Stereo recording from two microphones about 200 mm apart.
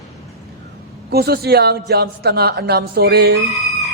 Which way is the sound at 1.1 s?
50° right (ahead or behind).